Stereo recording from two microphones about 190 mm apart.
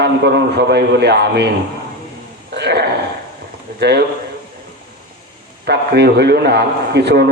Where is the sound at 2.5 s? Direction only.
60° right (ahead or behind).